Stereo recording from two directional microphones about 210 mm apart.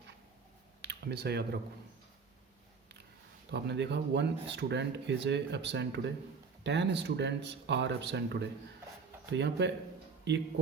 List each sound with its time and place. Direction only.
0.8 s computer keyboard: 50° right (ahead or behind)
3.5 s speech: 55° right (ahead or behind)